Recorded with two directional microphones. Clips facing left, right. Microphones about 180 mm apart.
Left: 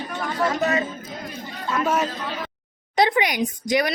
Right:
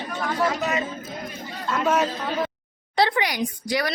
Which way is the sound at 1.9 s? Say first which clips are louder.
Right 2 dB; centre (ahead or behind).